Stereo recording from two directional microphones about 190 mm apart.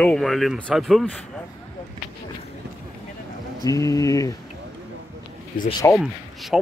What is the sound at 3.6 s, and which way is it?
Speech, 15° left (ahead or behind).